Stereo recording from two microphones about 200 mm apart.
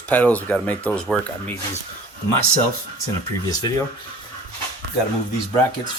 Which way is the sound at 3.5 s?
15° left (ahead or behind).